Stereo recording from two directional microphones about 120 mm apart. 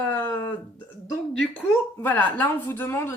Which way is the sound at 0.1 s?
15° left (ahead or behind).